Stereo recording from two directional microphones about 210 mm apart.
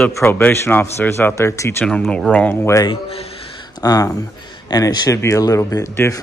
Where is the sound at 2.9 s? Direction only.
25° left (ahead or behind).